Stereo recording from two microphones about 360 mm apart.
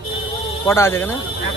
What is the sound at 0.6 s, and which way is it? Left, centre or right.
Speech, centre.